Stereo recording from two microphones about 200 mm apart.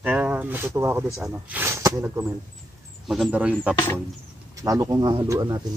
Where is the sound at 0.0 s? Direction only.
10° right (ahead or behind).